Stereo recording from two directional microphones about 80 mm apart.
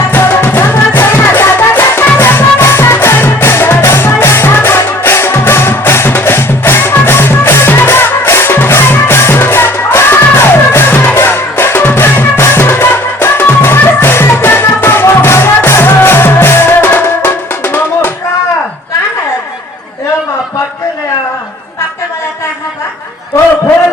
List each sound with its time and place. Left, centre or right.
0.1 s music: left